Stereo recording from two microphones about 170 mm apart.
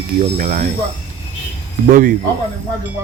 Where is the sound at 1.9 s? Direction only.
55° right (ahead or behind).